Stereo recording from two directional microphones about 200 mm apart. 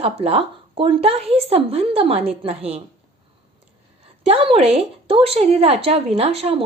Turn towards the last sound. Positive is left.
turn(degrees=-30)  # may be behind; listen again after turning